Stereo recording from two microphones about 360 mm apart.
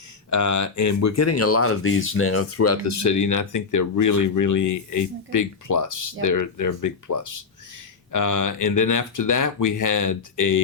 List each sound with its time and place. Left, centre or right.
0.3 s speech: left